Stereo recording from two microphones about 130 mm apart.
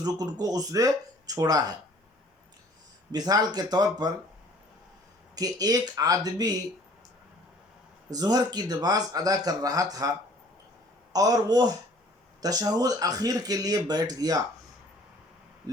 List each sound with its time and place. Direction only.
0.0 s speech: 30° right (ahead or behind)
3.1 s speech: 30° right (ahead or behind)
5.3 s speech: 30° right (ahead or behind)
8.1 s speech: 30° right (ahead or behind)